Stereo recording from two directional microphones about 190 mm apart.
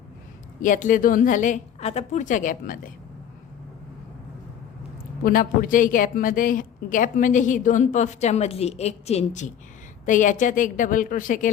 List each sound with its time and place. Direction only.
0.6 s a woman's voice: 45° left (ahead or behind)
5.2 s a woman's voice: 50° left (ahead or behind)